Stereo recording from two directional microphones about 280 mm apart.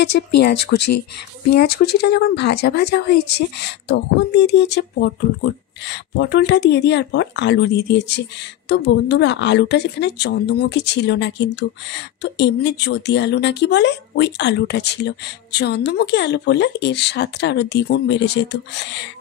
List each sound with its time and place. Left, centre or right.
0.4 s a woman's voice: left